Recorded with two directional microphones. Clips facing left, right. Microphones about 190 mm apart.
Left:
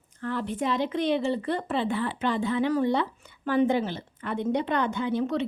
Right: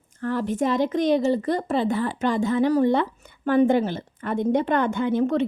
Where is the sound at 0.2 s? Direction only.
45° right (ahead or behind).